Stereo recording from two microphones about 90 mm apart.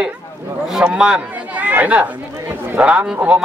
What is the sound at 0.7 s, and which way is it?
Speech, 5° right (ahead or behind).